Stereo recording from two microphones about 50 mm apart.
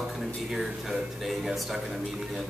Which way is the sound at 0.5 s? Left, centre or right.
Centre.